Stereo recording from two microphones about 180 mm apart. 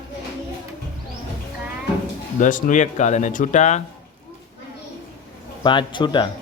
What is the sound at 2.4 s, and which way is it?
Speech, 45° left (ahead or behind).